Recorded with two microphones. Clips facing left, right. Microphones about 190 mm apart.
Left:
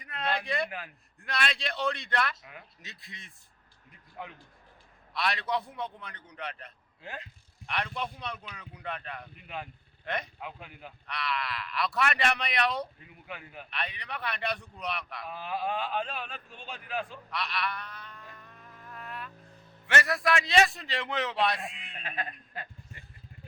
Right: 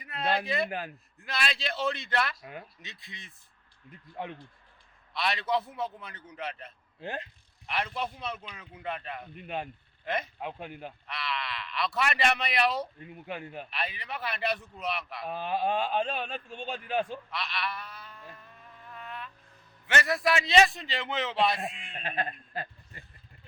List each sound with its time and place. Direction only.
0.0 s speech: 5° right (ahead or behind)
5.1 s speech: centre (ahead or behind)
10.4 s a man's voice: 30° right (ahead or behind)
11.0 s speech: centre (ahead or behind)
13.2 s a man's voice: 35° right (ahead or behind)
13.7 s speech: 5° right (ahead or behind)
15.2 s a man's voice: 35° right (ahead or behind)
17.3 s speech: centre (ahead or behind)
21.7 s a sound: 30° right (ahead or behind)